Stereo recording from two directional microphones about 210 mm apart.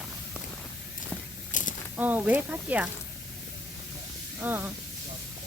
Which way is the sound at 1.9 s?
10° right (ahead or behind).